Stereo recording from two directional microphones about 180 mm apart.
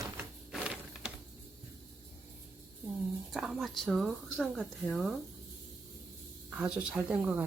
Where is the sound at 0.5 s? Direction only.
5° right (ahead or behind).